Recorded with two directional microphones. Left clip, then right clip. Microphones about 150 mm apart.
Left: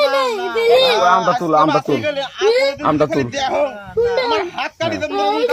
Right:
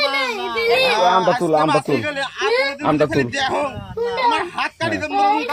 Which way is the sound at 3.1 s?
45° left (ahead or behind).